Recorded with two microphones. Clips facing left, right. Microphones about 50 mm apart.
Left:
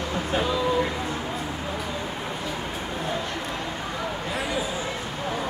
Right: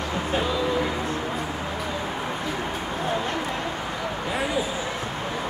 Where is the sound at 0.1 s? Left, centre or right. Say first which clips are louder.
Even; centre.